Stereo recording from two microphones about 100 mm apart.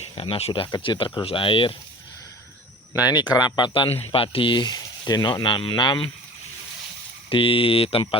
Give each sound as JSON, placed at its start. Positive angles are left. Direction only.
{"t": 0.0, "sound": "speech", "side_deg": 80}
{"t": 0.8, "sound": "speech", "side_deg": 60}
{"t": 3.0, "sound": "speech", "side_deg": 45}
{"t": 4.1, "sound": "speech", "side_deg": 65}
{"t": 7.3, "sound": "speech", "side_deg": 65}